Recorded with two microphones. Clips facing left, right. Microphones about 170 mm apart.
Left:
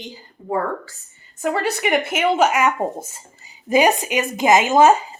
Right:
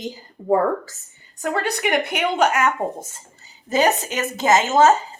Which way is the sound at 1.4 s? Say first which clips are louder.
Left 2 dB; 5° left (ahead or behind).